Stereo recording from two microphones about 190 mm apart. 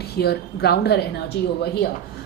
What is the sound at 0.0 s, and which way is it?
Speech, 60° left (ahead or behind).